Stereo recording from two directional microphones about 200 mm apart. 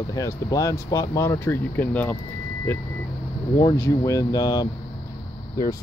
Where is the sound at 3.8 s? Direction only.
15° left (ahead or behind).